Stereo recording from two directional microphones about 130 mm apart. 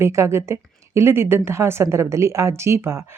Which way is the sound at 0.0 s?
20° right (ahead or behind).